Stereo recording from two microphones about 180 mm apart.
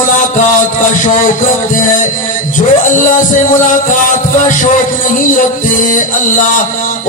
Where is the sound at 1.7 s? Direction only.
45° left (ahead or behind).